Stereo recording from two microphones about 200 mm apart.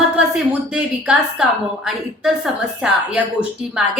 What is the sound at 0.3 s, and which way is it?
A woman's voice, 5° right (ahead or behind).